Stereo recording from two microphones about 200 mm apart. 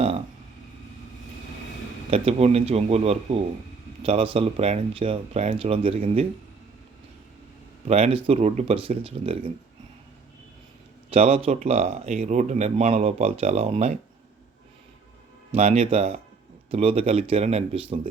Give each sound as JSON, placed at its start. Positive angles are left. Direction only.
{"t": 2.0, "sound": "speech", "side_deg": -30}
{"t": 7.9, "sound": "speech", "side_deg": -30}
{"t": 11.1, "sound": "speech", "side_deg": -30}
{"t": 15.5, "sound": "speech", "side_deg": -30}